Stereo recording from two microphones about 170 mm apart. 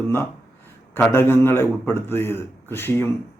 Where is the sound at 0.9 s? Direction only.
10° left (ahead or behind).